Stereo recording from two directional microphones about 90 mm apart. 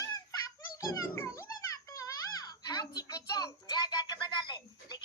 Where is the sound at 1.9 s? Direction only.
40° left (ahead or behind).